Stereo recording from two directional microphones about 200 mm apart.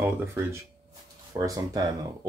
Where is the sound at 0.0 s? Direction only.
10° right (ahead or behind).